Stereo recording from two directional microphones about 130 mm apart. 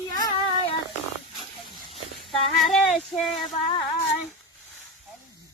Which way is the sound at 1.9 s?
45° left (ahead or behind).